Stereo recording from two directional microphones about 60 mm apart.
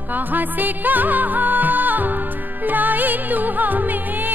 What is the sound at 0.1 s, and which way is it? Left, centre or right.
Music, right.